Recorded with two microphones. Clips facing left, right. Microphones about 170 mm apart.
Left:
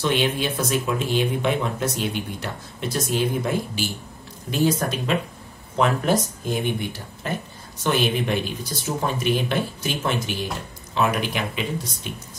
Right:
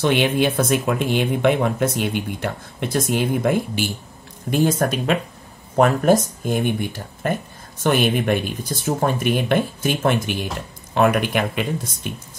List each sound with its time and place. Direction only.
0.0 s speech: 60° right (ahead or behind)